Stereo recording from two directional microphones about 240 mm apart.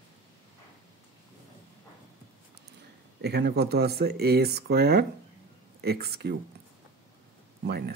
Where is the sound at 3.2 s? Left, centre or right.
Right.